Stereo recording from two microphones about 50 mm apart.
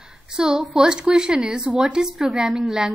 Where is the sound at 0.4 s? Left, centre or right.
Centre.